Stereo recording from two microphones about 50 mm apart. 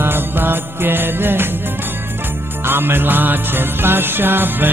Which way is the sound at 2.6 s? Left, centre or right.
Right.